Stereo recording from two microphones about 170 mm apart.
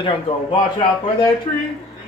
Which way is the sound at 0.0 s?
30° left (ahead or behind).